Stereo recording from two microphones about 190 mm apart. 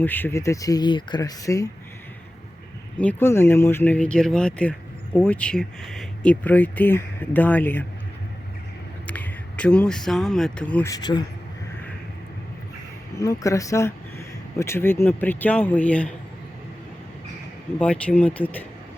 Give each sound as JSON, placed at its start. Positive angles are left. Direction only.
{"t": 0.0, "sound": "speech", "side_deg": 10}
{"t": 3.0, "sound": "speech", "side_deg": 10}
{"t": 9.0, "sound": "speech", "side_deg": 10}
{"t": 10.9, "sound": "a man's voice", "side_deg": 20}
{"t": 13.1, "sound": "speech", "side_deg": 15}
{"t": 17.7, "sound": "speech", "side_deg": 5}